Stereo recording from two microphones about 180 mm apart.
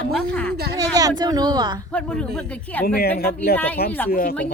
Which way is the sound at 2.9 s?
60° left (ahead or behind).